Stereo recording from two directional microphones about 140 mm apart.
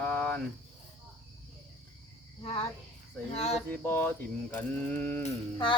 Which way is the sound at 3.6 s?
15° left (ahead or behind).